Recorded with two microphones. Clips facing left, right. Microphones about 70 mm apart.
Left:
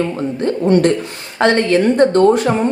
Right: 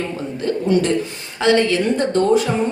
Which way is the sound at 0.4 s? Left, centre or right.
Left.